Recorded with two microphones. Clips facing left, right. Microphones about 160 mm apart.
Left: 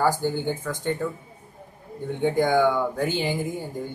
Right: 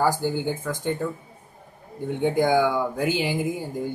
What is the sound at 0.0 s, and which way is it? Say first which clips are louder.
Speech: even; 10° right (ahead or behind).